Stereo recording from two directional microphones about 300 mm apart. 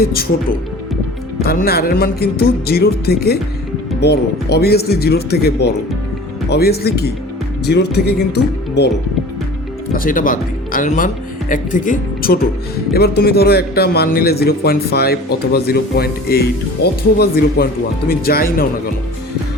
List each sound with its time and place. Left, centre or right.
1.5 s a man's voice: left
9.9 s a man's voice: left